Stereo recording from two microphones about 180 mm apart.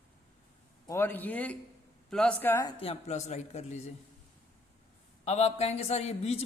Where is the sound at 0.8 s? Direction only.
15° left (ahead or behind).